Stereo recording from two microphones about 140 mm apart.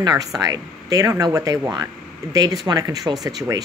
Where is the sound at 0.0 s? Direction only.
25° right (ahead or behind).